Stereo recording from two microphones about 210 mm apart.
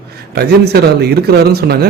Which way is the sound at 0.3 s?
50° right (ahead or behind).